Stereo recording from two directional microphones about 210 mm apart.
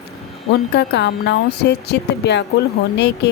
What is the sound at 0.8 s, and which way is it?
A woman's voice, 55° left (ahead or behind).